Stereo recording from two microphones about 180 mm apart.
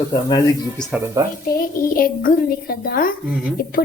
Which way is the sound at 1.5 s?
55° left (ahead or behind).